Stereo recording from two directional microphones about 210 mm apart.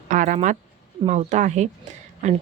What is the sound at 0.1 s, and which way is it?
Speech, 40° right (ahead or behind).